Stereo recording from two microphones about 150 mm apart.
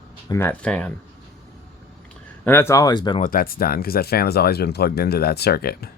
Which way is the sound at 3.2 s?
70° left (ahead or behind).